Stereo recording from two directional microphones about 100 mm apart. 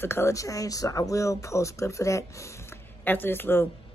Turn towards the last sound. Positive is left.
turn(degrees=20)  # may be behind; listen again after turning